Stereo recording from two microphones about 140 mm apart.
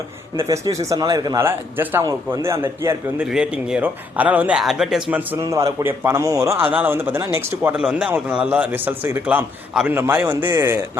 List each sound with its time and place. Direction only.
0.3 s a man's voice: 25° right (ahead or behind)
1.4 s a man's voice: 15° right (ahead or behind)
3.2 s a man's voice: 5° right (ahead or behind)
7.8 s a man's voice: 5° right (ahead or behind)